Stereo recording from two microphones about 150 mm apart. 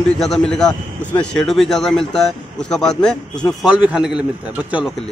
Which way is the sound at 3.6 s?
10° right (ahead or behind).